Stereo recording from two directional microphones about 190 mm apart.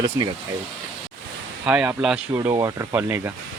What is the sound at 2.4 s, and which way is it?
Speech, 15° right (ahead or behind).